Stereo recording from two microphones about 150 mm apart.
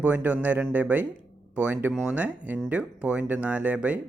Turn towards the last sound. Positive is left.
turn(degrees=-10)  # may be behind; listen again after turning